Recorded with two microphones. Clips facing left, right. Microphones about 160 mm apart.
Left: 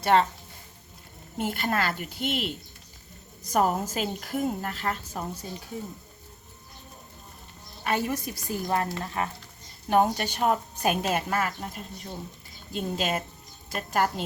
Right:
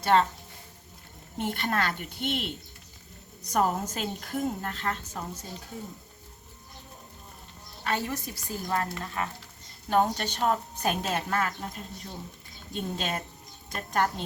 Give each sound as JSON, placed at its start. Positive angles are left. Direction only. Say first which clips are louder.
{"t": 0.0, "sound": "a woman's voice", "louder": "left 1 dB", "side_deg": 5}
{"t": 1.4, "sound": "a woman's voice", "louder": "left 1 dB", "side_deg": 5}
{"t": 3.5, "sound": "a woman's voice", "louder": "left 2 dB", "side_deg": 5}
{"t": 7.9, "sound": "a woman's voice", "louder": "left 3 dB", "side_deg": 15}
{"t": 9.9, "sound": "a woman's voice", "louder": "left 2 dB", "side_deg": 10}